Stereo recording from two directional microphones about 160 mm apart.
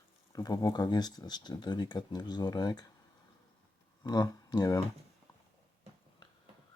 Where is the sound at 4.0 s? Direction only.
25° left (ahead or behind).